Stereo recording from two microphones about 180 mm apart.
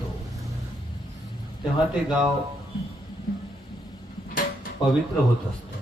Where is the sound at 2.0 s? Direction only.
Centre (ahead or behind).